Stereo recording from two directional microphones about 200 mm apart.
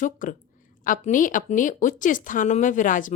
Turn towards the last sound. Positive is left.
turn(degrees=40)  # may be behind; listen again after turning